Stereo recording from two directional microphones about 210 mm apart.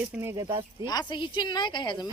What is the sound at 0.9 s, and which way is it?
A woman's voice, 20° left (ahead or behind).